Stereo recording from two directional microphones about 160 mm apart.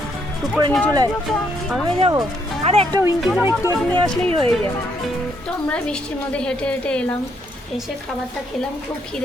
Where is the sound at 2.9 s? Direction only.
15° right (ahead or behind).